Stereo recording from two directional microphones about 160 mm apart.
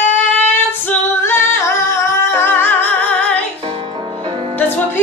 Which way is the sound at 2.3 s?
15° left (ahead or behind).